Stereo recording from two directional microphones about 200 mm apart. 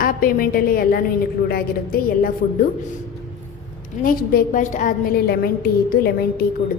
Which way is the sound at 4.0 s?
45° left (ahead or behind).